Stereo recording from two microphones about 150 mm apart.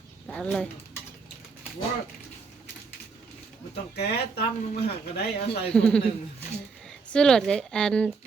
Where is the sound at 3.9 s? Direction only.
90° left.